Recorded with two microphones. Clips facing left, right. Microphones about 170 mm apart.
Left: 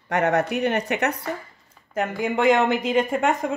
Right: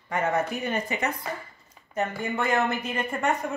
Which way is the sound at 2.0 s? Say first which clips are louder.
Left 5 dB; 90° left.